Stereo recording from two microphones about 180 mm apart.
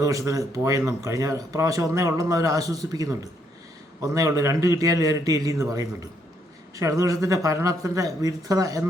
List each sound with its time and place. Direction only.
0.0 s speech: 20° right (ahead or behind)